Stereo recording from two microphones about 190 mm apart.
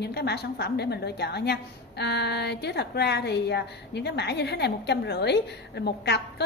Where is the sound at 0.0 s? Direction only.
60° left (ahead or behind).